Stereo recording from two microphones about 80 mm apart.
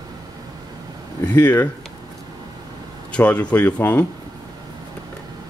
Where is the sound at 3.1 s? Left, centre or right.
Centre.